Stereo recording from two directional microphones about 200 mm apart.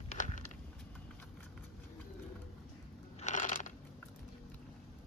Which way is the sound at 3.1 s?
35° left (ahead or behind).